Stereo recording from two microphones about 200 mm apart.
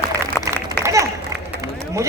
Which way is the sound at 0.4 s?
15° right (ahead or behind).